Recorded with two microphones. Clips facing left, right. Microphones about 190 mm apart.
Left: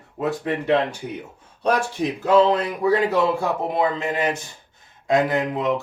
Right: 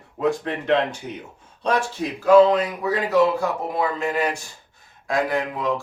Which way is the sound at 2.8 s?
30° left (ahead or behind).